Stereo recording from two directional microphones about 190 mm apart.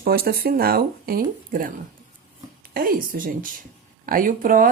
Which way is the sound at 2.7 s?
50° right (ahead or behind).